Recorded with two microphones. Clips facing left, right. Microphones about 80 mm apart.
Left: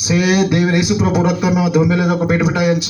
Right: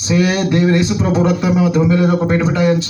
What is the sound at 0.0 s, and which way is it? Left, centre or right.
A man's voice, centre.